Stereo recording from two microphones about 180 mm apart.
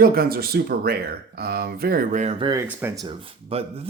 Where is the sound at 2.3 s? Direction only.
20° right (ahead or behind).